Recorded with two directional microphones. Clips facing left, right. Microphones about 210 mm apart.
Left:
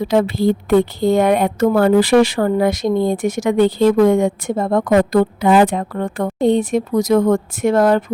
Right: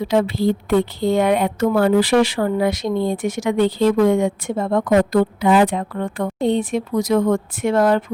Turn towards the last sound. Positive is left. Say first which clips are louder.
# left 3 dB
turn(degrees=40)  # may be behind; listen again after turning